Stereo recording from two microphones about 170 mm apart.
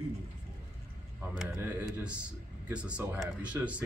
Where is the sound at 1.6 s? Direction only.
10° right (ahead or behind).